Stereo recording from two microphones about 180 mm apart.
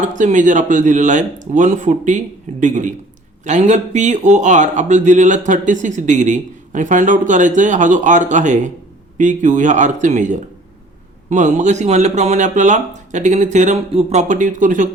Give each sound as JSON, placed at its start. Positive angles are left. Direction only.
{"t": 0.1, "sound": "speech", "side_deg": -45}